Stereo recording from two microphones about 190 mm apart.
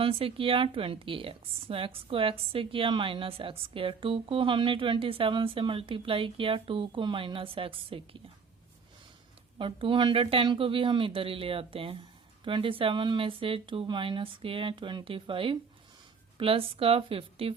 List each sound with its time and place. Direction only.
0.0 s a woman's voice: 30° right (ahead or behind)
9.6 s a woman's voice: 25° right (ahead or behind)